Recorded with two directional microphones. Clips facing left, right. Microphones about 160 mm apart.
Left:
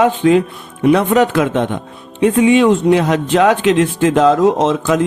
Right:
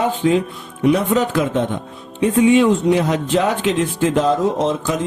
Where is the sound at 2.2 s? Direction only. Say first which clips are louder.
Left 2 dB; 90° left.